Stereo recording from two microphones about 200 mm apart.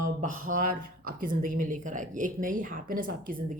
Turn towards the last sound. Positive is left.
turn(degrees=-45)  # may be behind; listen again after turning